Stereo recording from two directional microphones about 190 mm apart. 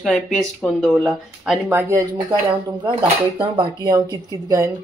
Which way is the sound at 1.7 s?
15° right (ahead or behind).